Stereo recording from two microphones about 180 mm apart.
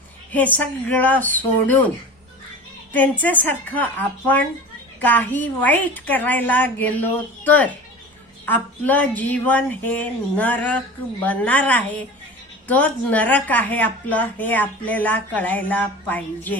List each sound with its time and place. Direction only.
0.3 s a woman's voice: 10° left (ahead or behind)
2.9 s a woman's voice: 10° left (ahead or behind)